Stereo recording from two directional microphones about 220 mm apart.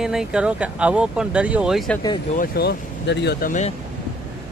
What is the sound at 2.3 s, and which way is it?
Speech, 40° left (ahead or behind).